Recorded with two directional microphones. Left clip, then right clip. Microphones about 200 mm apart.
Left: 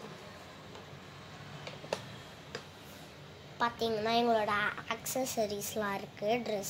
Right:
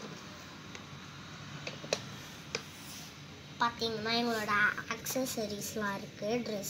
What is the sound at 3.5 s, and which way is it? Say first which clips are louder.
A woman's voice: even; 35° left (ahead or behind).